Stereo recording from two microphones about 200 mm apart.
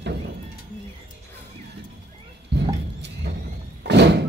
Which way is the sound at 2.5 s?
55° right (ahead or behind).